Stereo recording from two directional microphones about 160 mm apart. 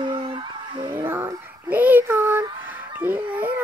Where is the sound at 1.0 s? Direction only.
15° right (ahead or behind).